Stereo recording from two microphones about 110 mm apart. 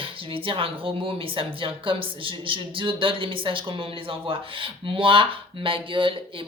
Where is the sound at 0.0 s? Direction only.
55° right (ahead or behind).